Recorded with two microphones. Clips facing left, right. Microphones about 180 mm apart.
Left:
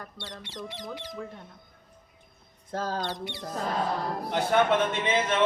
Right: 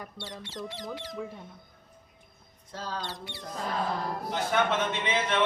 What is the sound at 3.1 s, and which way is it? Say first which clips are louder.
Speech: left 6 dB; 20° left (ahead or behind).